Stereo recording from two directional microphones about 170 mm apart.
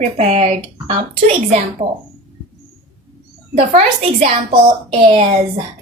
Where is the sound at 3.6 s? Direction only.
40° right (ahead or behind).